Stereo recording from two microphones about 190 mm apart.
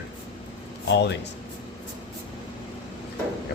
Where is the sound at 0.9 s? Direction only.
65° left (ahead or behind).